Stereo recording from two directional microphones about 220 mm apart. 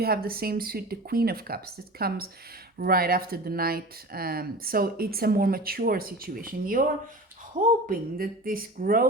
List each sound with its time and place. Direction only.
0.0 s speech: 45° right (ahead or behind)
7.9 s speech: 40° right (ahead or behind)